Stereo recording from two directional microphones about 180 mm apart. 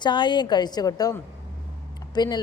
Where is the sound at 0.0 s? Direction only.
25° left (ahead or behind).